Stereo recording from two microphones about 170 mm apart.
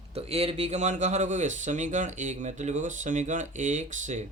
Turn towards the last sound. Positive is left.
turn(degrees=-45)  # may be behind; listen again after turning